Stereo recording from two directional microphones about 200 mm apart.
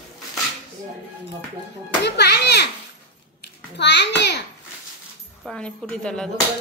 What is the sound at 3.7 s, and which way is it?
Speech, 60° left (ahead or behind).